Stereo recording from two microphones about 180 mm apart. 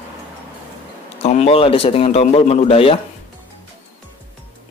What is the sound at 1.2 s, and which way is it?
Speech, 35° left (ahead or behind).